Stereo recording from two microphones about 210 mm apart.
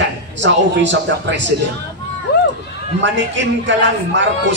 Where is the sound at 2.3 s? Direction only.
50° left (ahead or behind).